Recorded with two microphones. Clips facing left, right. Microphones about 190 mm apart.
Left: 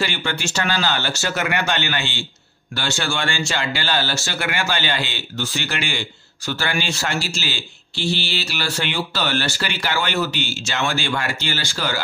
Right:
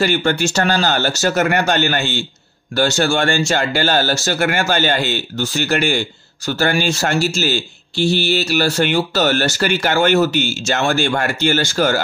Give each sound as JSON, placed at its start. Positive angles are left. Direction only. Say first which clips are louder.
{"t": 0.0, "sound": "speech", "louder": "right 8 dB", "side_deg": -45}